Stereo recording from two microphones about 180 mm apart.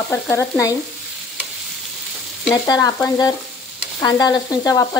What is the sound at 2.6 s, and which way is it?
Frying, 20° left (ahead or behind).